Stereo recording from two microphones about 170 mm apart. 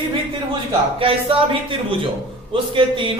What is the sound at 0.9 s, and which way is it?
Speech, 30° right (ahead or behind).